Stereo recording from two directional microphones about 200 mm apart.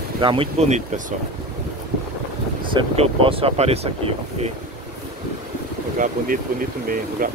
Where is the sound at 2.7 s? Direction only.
25° right (ahead or behind).